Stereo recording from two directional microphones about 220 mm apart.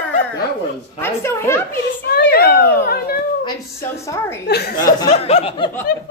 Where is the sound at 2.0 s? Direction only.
45° left (ahead or behind).